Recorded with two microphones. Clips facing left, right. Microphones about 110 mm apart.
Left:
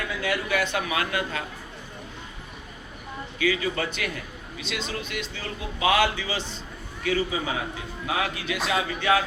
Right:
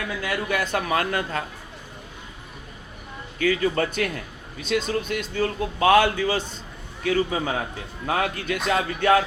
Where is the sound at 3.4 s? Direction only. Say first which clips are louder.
Right 4 dB; 45° right (ahead or behind).